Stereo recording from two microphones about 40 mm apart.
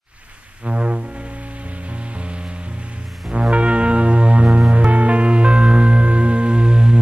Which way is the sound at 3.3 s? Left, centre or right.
Right.